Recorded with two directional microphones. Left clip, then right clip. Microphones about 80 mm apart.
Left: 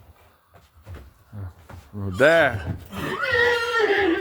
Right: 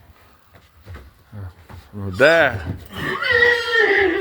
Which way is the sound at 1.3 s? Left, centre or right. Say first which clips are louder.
Right 2 dB; left.